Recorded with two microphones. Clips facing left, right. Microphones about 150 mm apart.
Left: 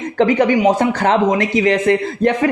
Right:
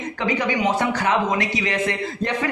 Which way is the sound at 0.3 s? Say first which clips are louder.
Left 5 dB; 45° left (ahead or behind).